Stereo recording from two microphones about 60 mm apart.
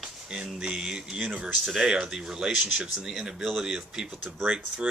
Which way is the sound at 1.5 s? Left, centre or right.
Centre.